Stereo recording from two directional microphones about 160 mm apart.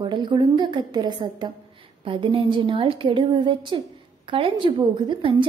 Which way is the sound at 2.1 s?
35° right (ahead or behind).